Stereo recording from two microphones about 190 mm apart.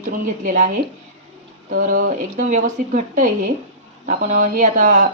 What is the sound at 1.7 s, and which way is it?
Speech, 45° right (ahead or behind).